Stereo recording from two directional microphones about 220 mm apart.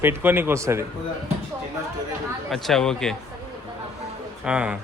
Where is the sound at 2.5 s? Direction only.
Centre (ahead or behind).